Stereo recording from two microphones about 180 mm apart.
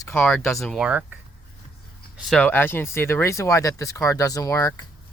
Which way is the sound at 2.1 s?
Centre (ahead or behind).